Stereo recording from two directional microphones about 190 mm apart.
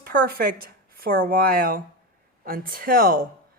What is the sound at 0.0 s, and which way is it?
A woman's voice, 50° right (ahead or behind).